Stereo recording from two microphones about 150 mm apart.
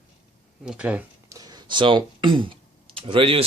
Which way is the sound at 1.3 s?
25° right (ahead or behind).